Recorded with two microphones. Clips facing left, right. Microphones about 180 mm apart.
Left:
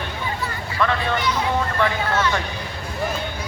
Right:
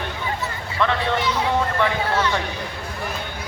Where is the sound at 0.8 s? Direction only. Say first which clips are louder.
Even; 20° right (ahead or behind).